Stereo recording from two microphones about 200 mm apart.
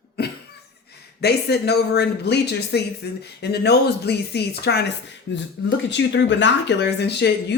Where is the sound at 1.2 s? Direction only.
55° left (ahead or behind).